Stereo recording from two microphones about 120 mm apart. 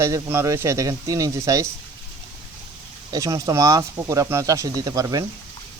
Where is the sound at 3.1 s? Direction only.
30° right (ahead or behind).